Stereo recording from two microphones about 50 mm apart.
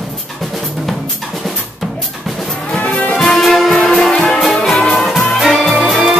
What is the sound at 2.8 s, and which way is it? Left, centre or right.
Music, left.